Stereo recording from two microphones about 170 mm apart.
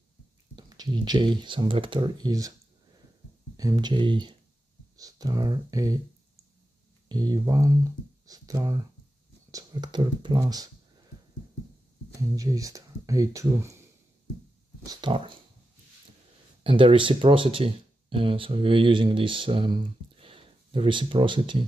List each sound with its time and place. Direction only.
0.6 s speech: 25° right (ahead or behind)
3.5 s speech: 20° right (ahead or behind)
7.1 s speech: 25° right (ahead or behind)
12.4 s speech: 20° right (ahead or behind)
14.9 s a sound: 30° right (ahead or behind)
16.6 s speech: 30° right (ahead or behind)